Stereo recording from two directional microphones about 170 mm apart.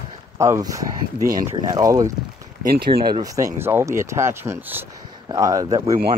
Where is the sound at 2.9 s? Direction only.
35° right (ahead or behind).